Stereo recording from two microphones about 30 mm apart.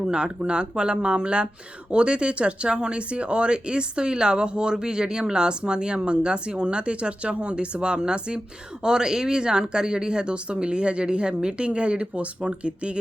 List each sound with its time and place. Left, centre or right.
0.1 s speech: right